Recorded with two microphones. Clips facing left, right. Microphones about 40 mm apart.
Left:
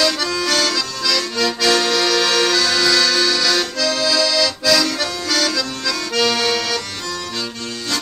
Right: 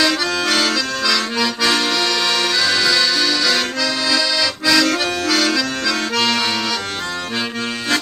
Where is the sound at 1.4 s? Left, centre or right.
Centre.